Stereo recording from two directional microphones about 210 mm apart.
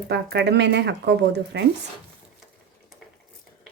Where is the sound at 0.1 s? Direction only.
55° right (ahead or behind).